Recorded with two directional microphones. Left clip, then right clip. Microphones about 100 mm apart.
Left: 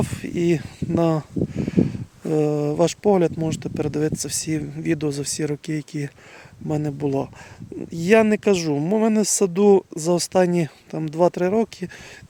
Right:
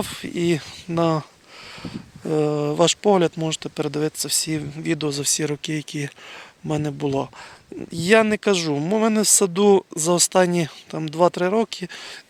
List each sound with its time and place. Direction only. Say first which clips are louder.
0.0 s speech: left 1 dB; 40° left (ahead or behind)